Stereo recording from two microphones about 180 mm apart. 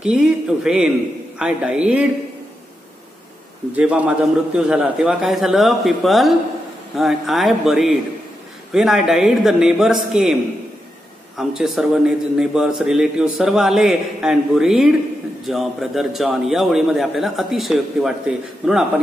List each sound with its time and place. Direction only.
0.0 s a man's voice: 5° right (ahead or behind)
3.7 s a man's voice: 5° right (ahead or behind)
11.3 s a man's voice: centre (ahead or behind)